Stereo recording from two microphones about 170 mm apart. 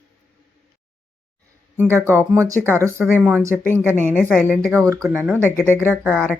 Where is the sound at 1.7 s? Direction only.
15° right (ahead or behind).